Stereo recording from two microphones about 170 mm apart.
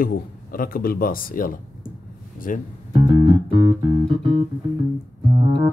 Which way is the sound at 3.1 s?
25° right (ahead or behind).